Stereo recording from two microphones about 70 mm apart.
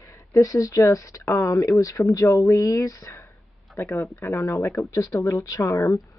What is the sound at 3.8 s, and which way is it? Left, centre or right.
Speech, left.